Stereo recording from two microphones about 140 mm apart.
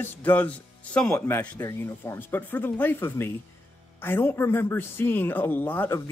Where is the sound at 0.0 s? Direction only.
10° left (ahead or behind).